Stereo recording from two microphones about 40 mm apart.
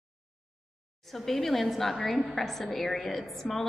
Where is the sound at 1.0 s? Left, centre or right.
Centre.